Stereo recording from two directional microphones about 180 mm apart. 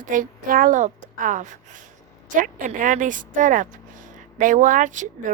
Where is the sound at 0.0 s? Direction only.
45° right (ahead or behind).